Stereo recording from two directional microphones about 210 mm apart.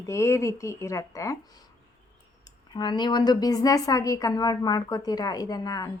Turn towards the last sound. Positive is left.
turn(degrees=15)  # may be behind; listen again after turning